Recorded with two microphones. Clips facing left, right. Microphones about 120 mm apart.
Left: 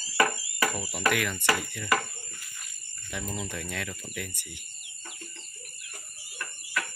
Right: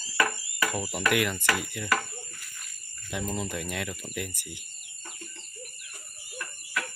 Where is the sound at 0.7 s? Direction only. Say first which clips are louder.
Right 3 dB; 20° right (ahead or behind).